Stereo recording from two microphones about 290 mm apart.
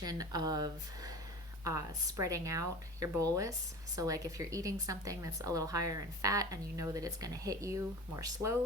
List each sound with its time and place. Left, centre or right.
0.0 s a woman's voice: centre